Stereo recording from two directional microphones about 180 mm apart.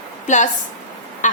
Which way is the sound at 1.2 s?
40° left (ahead or behind).